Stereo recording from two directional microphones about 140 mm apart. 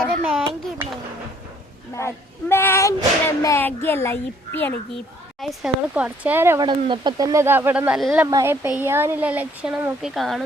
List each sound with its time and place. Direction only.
0.3 s a sound: centre (ahead or behind)
2.0 s a child's voice: 20° left (ahead or behind)
5.4 s speech: centre (ahead or behind)
6.6 s speech: 35° right (ahead or behind); by 8.0 s 10° right (ahead or behind)
8.3 s speech: 20° right (ahead or behind); by 10.4 s centre (ahead or behind)